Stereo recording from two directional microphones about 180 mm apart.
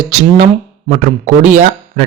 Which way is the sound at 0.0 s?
40° right (ahead or behind).